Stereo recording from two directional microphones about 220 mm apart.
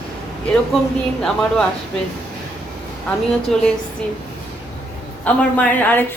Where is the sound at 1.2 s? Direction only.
5° left (ahead or behind).